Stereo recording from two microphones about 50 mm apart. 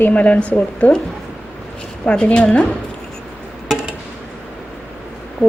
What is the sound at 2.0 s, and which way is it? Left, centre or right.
Speech, left.